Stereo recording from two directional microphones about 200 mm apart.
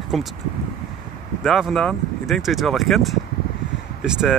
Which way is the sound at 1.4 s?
Centre (ahead or behind).